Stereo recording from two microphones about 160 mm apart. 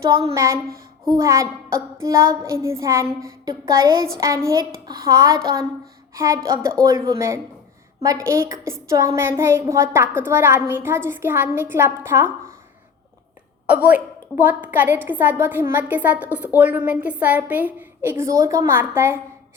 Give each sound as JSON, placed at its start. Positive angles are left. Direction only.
{"t": 0.3, "sound": "a child's voice", "side_deg": -20}
{"t": 13.7, "sound": "a woman's voice", "side_deg": -10}